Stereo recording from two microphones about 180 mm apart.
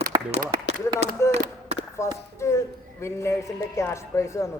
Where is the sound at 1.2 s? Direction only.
15° left (ahead or behind).